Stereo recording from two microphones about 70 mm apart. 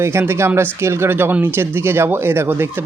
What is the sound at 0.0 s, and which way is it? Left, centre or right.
Speech, right.